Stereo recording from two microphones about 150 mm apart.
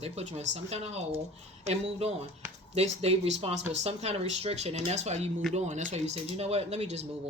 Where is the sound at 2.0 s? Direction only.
40° right (ahead or behind).